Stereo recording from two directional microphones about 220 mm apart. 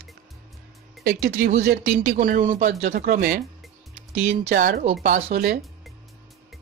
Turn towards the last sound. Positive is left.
turn(degrees=-35)  # may be behind; listen again after turning